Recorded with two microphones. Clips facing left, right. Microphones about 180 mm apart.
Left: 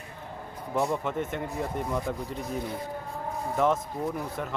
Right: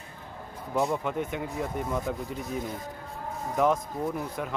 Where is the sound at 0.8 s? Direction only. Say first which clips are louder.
Even; centre (ahead or behind).